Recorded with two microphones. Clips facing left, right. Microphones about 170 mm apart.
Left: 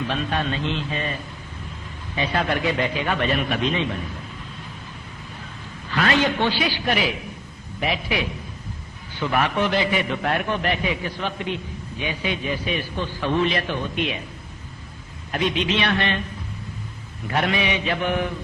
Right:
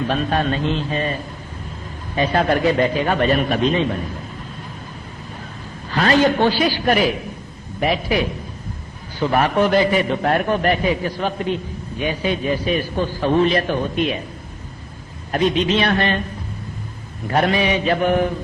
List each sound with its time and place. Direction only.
0.1 s a man's voice: 45° right (ahead or behind)
5.9 s a man's voice: 35° right (ahead or behind)
15.3 s a man's voice: 40° right (ahead or behind)
17.2 s a man's voice: 40° right (ahead or behind)